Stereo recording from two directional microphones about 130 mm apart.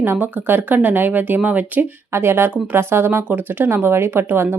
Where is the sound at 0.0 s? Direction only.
15° right (ahead or behind).